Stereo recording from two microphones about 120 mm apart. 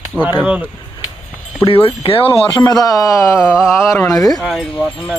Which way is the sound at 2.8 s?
30° left (ahead or behind).